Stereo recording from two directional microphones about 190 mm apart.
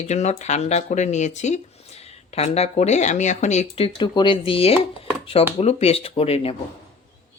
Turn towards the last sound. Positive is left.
turn(degrees=30)  # may be behind; listen again after turning